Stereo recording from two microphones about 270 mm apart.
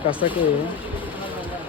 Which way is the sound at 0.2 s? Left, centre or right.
Centre.